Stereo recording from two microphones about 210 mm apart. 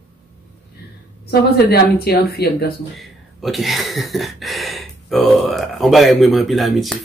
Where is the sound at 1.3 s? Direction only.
50° left (ahead or behind).